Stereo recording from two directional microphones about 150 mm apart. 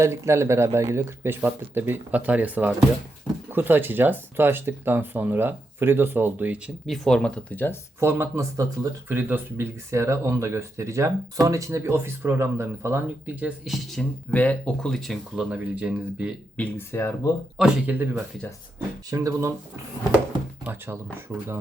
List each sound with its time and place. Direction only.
0.0 s speech: 20° right (ahead or behind)
6.8 s speech: centre (ahead or behind)
7.9 s speech: 15° right (ahead or behind)
13.9 s speech: 5° left (ahead or behind)
16.6 s speech: 15° left (ahead or behind)
17.6 s speech: 10° right (ahead or behind)
20.7 s speech: 15° right (ahead or behind)